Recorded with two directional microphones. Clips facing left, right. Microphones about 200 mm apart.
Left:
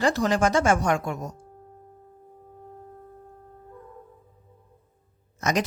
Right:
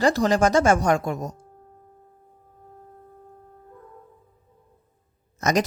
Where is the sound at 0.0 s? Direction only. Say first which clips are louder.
Right 3 dB; 40° right (ahead or behind).